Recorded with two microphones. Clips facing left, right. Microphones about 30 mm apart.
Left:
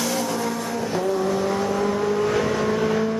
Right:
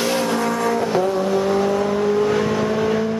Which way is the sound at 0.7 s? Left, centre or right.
Right.